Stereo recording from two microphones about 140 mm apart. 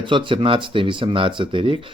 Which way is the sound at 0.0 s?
35° right (ahead or behind).